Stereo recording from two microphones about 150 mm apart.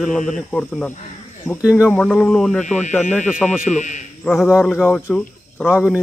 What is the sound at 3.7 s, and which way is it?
Speech, 55° left (ahead or behind).